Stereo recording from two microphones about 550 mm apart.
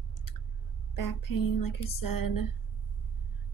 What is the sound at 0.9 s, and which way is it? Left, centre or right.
A woman's voice, left.